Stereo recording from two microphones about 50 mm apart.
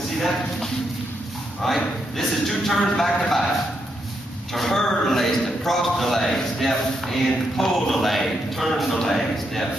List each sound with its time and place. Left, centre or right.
0.2 s a man's voice: centre
4.6 s a man's voice: centre